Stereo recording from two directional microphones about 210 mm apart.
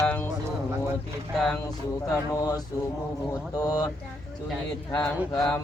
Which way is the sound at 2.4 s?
15° left (ahead or behind).